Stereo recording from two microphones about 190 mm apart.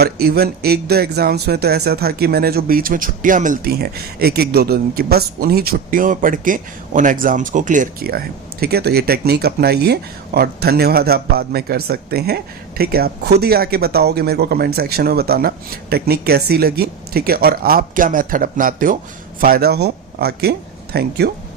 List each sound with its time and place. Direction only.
0.0 s speech: 55° right (ahead or behind)